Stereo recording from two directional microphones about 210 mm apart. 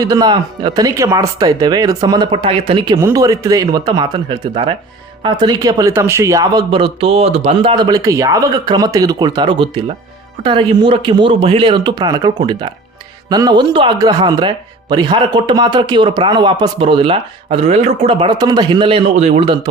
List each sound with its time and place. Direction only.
0.0 s speech: 20° right (ahead or behind)